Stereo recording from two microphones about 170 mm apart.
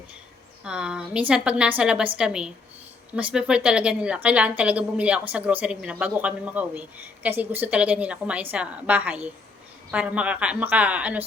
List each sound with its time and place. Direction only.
0.6 s a woman's voice: 5° right (ahead or behind)